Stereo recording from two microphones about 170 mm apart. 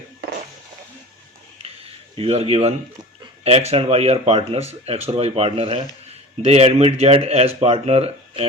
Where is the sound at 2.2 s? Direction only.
35° right (ahead or behind).